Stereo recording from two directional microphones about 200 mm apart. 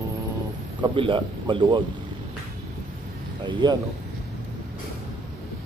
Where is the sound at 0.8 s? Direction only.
25° right (ahead or behind).